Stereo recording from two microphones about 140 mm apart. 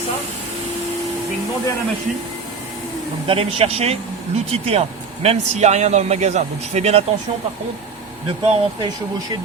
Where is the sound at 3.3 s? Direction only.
45° right (ahead or behind).